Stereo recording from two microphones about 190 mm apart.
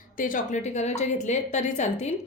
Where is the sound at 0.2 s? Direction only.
45° left (ahead or behind).